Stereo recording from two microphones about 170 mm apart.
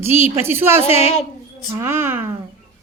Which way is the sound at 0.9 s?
40° left (ahead or behind).